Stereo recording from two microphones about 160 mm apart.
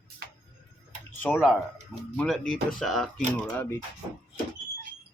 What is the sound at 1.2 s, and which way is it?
Speech, 10° left (ahead or behind).